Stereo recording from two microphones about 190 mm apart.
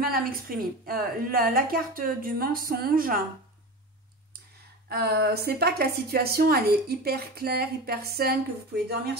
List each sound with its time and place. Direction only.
0.0 s a woman's voice: 50° right (ahead or behind)
4.8 s a woman's voice: 55° right (ahead or behind)